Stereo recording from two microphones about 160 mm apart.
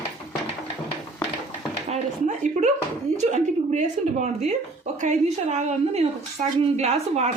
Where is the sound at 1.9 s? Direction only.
45° right (ahead or behind).